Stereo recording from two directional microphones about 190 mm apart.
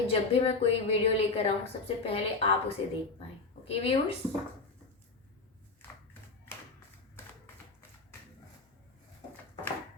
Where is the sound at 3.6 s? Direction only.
30° left (ahead or behind).